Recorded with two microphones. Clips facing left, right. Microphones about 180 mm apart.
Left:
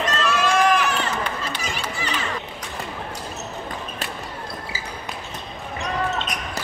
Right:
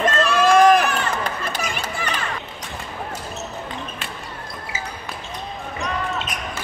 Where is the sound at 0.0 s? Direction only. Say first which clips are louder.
Right 4 dB; 55° right (ahead or behind).